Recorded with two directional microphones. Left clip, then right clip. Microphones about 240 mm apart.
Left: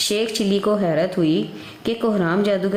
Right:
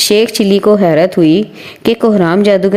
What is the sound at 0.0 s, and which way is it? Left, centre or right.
A woman's voice, right.